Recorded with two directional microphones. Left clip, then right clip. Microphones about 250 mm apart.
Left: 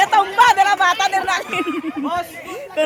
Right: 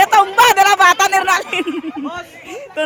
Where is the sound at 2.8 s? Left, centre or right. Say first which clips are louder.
Left 1 dB; centre.